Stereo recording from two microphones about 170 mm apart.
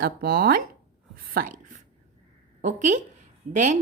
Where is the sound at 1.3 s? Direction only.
55° right (ahead or behind).